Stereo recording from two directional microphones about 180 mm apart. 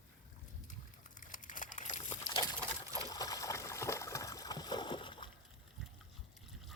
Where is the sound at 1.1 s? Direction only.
45° left (ahead or behind).